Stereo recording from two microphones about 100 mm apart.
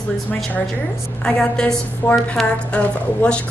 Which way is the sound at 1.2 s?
10° left (ahead or behind).